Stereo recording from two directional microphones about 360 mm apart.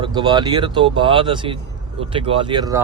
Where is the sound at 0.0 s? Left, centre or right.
Centre.